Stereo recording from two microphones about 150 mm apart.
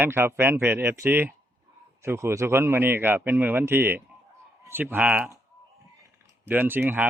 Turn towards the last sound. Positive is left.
turn(degrees=-15)  # may be behind; listen again after turning